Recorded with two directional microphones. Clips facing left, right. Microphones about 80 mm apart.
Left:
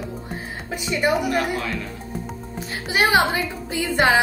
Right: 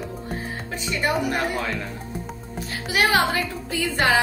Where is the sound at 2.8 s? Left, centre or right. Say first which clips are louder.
Left 2 dB; left.